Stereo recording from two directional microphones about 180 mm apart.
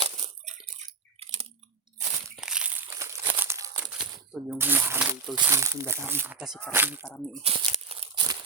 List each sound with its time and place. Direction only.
0.0 s a sound: 35° right (ahead or behind)
1.2 s chewing: 30° right (ahead or behind)
2.3 s crumpling: 5° right (ahead or behind)
3.9 s speech: 5° right (ahead or behind)
7.4 s crumpling: 30° right (ahead or behind)